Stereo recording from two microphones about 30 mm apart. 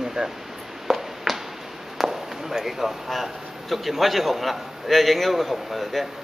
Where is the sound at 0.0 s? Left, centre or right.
Centre.